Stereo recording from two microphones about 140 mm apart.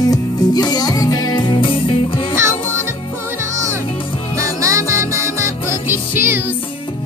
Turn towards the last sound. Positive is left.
turn(degrees=-15)  # may be behind; listen again after turning